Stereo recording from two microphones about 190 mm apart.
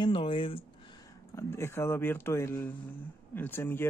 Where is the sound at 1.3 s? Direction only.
15° left (ahead or behind).